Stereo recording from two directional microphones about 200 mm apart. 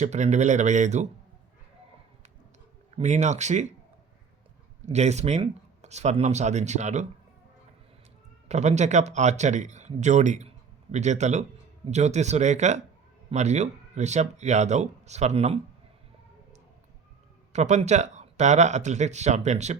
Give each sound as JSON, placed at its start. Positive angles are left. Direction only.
{"t": 0.0, "sound": "speech", "side_deg": -35}
{"t": 2.9, "sound": "speech", "side_deg": -35}
{"t": 4.9, "sound": "speech", "side_deg": -35}
{"t": 8.4, "sound": "speech", "side_deg": -35}
{"t": 17.5, "sound": "speech", "side_deg": -35}